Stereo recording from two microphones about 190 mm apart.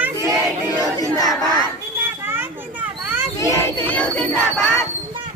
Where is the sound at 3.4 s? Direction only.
10° left (ahead or behind).